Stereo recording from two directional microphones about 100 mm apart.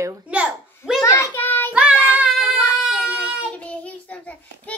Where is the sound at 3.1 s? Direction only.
10° left (ahead or behind).